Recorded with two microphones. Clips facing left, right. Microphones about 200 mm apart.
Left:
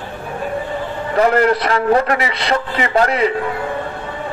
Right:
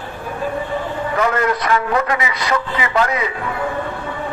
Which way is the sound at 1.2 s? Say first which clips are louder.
Left 6 dB; 35° left (ahead or behind).